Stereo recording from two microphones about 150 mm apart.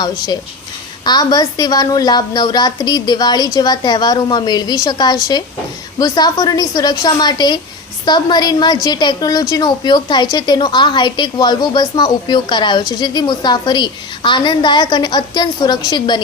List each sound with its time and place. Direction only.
1.0 s a woman's voice: 25° left (ahead or behind)